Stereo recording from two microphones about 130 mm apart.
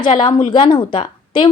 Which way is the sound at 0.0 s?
40° left (ahead or behind).